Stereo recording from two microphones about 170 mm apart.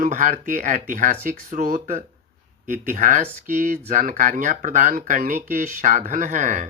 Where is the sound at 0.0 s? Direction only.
50° right (ahead or behind).